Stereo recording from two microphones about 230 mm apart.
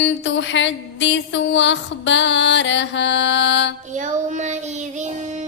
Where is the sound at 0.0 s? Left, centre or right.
Left.